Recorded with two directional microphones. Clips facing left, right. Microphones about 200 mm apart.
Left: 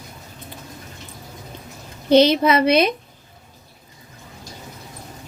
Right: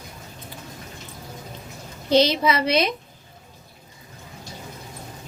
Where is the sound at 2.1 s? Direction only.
55° left (ahead or behind).